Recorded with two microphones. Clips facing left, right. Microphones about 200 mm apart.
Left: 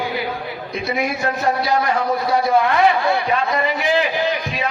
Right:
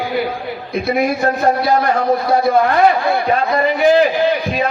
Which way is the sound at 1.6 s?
50° right (ahead or behind).